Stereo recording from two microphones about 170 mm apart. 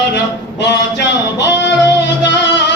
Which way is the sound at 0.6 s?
90° left.